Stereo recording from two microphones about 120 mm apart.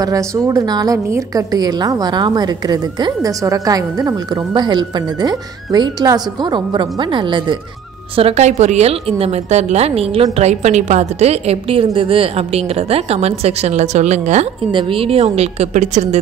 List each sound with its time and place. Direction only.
0.0 s a woman's voice: 30° right (ahead or behind)
8.2 s a woman's voice: 60° right (ahead or behind)
14.7 s a woman's voice: 45° right (ahead or behind); by 16.2 s 75° right (ahead or behind)